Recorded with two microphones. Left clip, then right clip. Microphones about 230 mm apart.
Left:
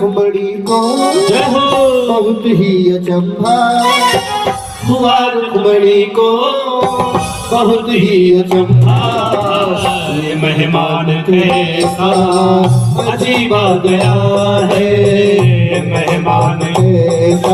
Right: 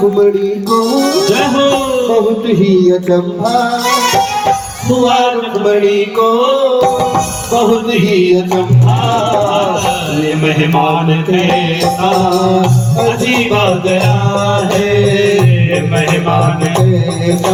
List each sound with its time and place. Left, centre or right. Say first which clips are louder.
0.9 s music: even; left
7.5 s music: even; left
10.4 s music: right 1 dB; left